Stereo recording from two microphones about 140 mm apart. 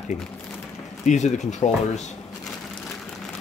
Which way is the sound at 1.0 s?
55° left (ahead or behind).